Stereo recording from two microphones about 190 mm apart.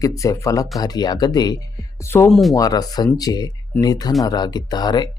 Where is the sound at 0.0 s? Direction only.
15° left (ahead or behind).